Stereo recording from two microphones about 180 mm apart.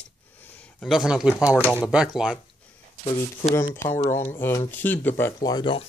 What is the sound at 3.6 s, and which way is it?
Speech, 15° left (ahead or behind).